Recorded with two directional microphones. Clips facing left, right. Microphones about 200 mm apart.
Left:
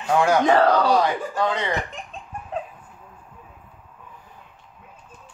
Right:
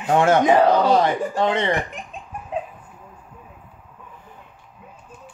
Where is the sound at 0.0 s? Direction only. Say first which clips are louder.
Right 2 dB; 25° right (ahead or behind).